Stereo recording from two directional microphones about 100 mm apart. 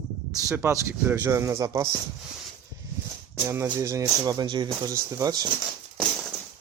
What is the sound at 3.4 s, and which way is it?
Speech, 30° right (ahead or behind).